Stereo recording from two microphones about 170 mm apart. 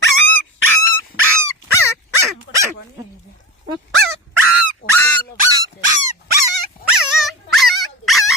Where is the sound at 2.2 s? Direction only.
15° right (ahead or behind).